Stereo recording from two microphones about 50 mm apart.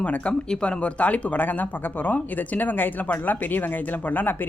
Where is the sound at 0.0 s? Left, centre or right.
Left.